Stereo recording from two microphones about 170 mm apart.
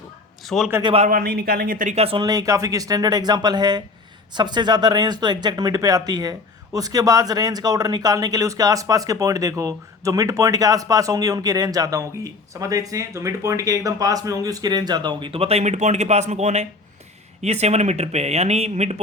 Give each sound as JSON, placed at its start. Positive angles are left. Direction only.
{"t": 0.4, "sound": "a man's voice", "side_deg": 0}
{"t": 0.8, "sound": "speech", "side_deg": -30}
{"t": 1.0, "sound": "speech", "side_deg": -60}
{"t": 2.2, "sound": "speech", "side_deg": -20}